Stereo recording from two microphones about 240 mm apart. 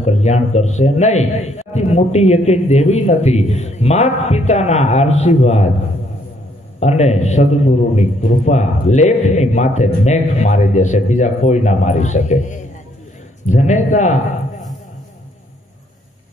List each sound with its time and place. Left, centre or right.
0.0 s a man's voice: left
6.8 s a man's voice: left